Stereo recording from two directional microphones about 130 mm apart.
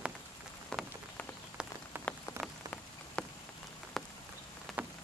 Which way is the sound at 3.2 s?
5° left (ahead or behind).